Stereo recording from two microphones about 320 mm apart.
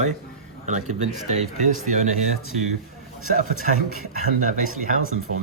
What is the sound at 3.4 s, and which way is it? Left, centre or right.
Speech, left.